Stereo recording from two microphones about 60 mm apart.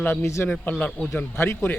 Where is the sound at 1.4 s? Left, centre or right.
Left.